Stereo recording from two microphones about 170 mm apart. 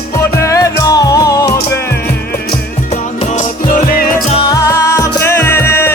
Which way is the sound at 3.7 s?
50° left (ahead or behind).